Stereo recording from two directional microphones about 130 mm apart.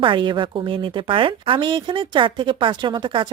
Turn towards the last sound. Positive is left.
turn(degrees=-40)  # may be behind; listen again after turning